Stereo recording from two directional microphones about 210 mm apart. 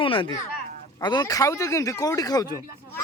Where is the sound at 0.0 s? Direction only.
25° left (ahead or behind).